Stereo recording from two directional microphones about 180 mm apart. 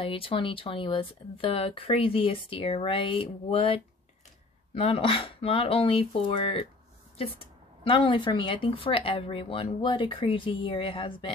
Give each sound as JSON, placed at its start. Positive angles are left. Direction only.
{"t": 0.0, "sound": "speech", "side_deg": 30}